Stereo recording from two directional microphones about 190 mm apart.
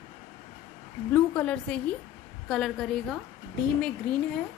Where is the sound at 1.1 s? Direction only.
10° left (ahead or behind).